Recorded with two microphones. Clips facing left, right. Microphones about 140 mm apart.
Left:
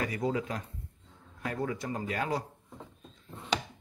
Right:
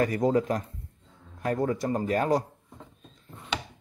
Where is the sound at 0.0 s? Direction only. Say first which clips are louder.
Right 8 dB; 45° right (ahead or behind).